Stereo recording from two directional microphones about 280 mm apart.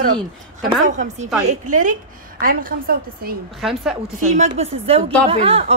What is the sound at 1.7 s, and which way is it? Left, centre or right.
A woman's voice, right.